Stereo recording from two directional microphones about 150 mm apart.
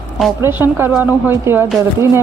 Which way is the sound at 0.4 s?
15° right (ahead or behind).